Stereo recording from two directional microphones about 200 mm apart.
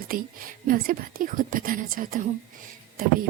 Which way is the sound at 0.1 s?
45° right (ahead or behind).